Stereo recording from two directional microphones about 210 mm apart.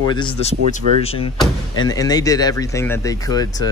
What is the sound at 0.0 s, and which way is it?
A man's voice, 20° left (ahead or behind).